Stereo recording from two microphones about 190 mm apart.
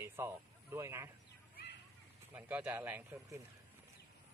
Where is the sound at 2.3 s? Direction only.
10° right (ahead or behind).